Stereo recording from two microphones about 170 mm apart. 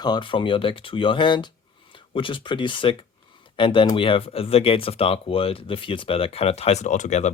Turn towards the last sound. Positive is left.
turn(degrees=45)  # may be behind; listen again after turning